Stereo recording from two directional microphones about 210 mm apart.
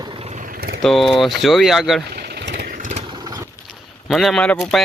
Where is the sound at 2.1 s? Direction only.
50° right (ahead or behind).